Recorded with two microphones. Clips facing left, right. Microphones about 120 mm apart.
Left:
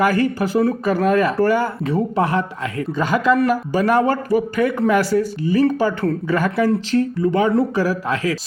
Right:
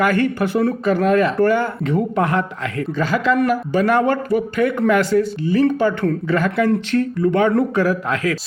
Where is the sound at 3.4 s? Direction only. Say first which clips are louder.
Even; 35° left (ahead or behind).